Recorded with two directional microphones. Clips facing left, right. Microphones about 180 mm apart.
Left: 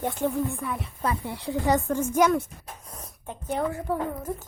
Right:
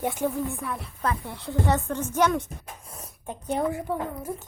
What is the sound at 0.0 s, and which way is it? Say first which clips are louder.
A woman's voice: even; 10° right (ahead or behind).